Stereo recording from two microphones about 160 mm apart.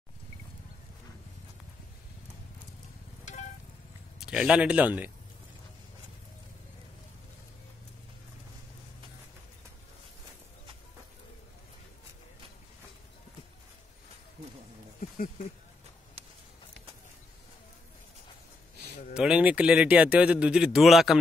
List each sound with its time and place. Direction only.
4.2 s speech: 5° right (ahead or behind)
15.0 s a sound: 50° left (ahead or behind)
19.1 s speech: 5° right (ahead or behind)